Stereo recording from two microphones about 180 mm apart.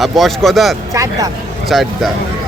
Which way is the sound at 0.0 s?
Centre (ahead or behind).